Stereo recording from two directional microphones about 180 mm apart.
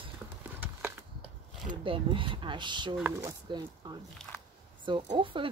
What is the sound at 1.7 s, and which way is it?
Speech, 30° right (ahead or behind).